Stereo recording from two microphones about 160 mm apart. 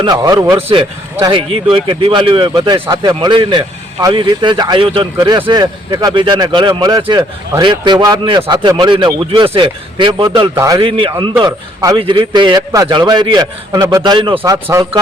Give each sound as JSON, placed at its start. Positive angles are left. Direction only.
{"t": 0.0, "sound": "a man's voice", "side_deg": -25}
{"t": 5.1, "sound": "a man's voice", "side_deg": -20}